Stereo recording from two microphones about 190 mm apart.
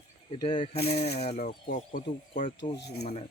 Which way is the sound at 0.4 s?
30° left (ahead or behind).